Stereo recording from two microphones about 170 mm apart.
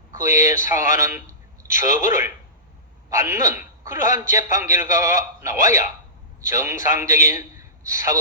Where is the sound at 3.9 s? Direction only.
50° left (ahead or behind).